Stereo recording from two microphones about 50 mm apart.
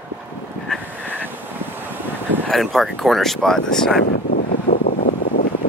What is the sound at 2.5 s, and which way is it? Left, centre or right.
Speech, centre.